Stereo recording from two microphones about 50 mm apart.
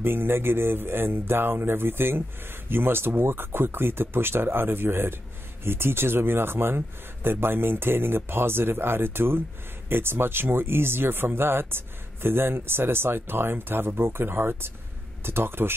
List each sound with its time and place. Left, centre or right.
0.0 s speech: right